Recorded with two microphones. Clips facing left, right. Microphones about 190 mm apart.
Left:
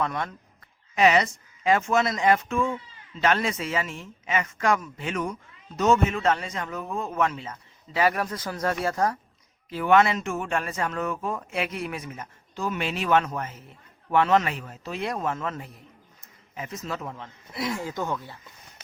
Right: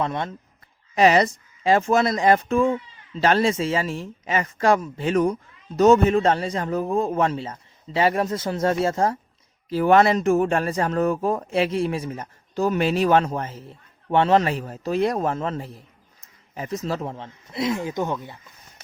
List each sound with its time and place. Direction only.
0.0 s speech: 25° right (ahead or behind)
0.9 s speech: 35° right (ahead or behind)
9.6 s speech: 35° right (ahead or behind); by 18.3 s 20° right (ahead or behind)